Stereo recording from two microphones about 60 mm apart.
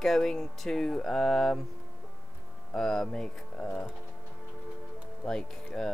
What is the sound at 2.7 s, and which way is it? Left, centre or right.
Speech, centre.